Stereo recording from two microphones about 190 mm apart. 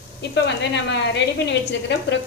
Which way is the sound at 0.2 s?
65° left (ahead or behind).